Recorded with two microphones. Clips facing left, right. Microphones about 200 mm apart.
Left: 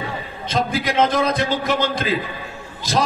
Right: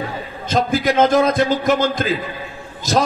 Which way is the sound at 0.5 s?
45° right (ahead or behind).